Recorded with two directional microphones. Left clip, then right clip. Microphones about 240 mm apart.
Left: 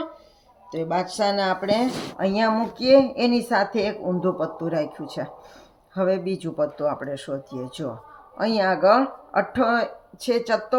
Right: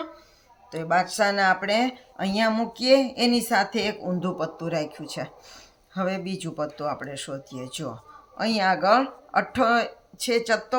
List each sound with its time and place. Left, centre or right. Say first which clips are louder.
0.7 s speech: right 2 dB; right